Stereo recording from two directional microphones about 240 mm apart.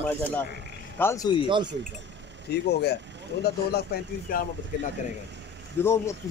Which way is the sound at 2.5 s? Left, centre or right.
Left.